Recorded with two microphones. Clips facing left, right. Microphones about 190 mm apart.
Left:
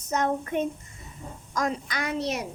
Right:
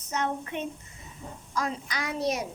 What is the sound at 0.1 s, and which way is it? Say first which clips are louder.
A child's voice: left 5 dB; 45° left (ahead or behind).